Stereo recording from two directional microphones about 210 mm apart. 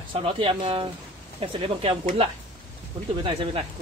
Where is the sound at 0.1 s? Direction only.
25° right (ahead or behind).